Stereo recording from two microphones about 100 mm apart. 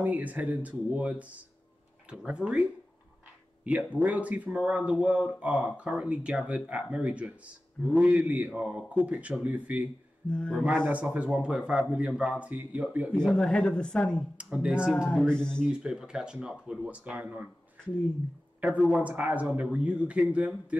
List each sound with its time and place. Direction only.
0.0 s speech: 15° right (ahead or behind)
10.3 s a woman's voice: 10° left (ahead or behind)
10.9 s speech: 15° right (ahead or behind)
13.1 s a woman's voice: 10° left (ahead or behind)
14.3 s speech: 10° right (ahead or behind)
15.1 s a woman's voice: 10° left (ahead or behind)
15.7 s speech: 5° right (ahead or behind)
18.6 s speech: 10° right (ahead or behind)